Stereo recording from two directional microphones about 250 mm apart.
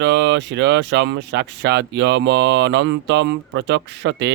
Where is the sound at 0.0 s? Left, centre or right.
Right.